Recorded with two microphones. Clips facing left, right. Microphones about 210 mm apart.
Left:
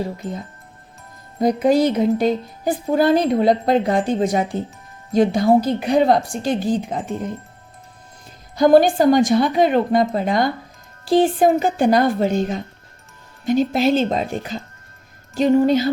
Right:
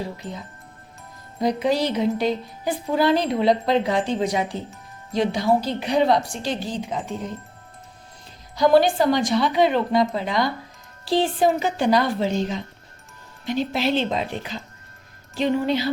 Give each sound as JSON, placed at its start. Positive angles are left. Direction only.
{"t": 1.4, "sound": "speech", "side_deg": 50}
{"t": 8.5, "sound": "speech", "side_deg": 50}